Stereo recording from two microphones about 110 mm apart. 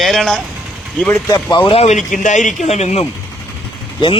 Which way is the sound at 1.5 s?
45° left (ahead or behind).